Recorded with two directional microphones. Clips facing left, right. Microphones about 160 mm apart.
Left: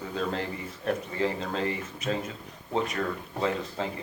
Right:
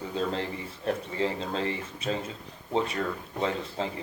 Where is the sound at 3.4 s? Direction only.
30° right (ahead or behind).